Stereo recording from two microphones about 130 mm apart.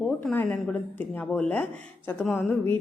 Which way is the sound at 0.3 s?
10° left (ahead or behind).